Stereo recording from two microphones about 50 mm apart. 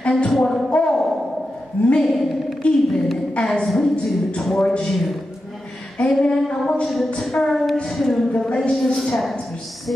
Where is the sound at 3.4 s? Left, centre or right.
Centre.